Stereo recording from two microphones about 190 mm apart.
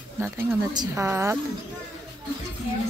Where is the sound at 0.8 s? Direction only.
15° right (ahead or behind).